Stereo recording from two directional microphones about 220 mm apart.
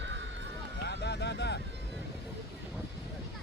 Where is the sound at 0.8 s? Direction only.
50° left (ahead or behind).